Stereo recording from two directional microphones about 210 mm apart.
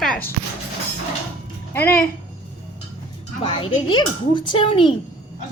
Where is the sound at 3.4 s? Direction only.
25° left (ahead or behind).